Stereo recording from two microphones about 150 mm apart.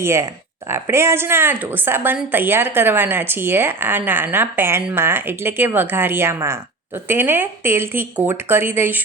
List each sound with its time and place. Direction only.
0.0 s a woman's voice: 20° right (ahead or behind)